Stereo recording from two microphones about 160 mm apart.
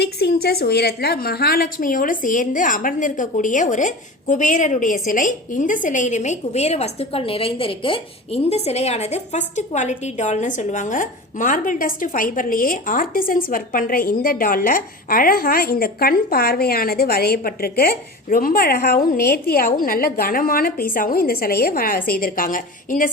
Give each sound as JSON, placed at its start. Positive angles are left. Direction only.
{"t": 0.0, "sound": "a woman's voice", "side_deg": 80}